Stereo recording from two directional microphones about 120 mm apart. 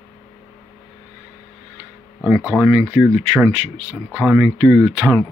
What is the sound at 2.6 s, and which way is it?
Speech, 15° right (ahead or behind).